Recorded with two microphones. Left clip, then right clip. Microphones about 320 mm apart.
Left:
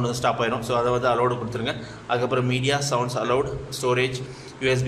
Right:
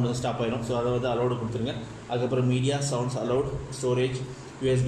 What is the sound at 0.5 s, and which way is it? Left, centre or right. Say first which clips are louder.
Speech: left 5 dB; left.